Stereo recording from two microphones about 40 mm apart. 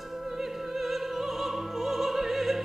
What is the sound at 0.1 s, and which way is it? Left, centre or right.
Music, centre.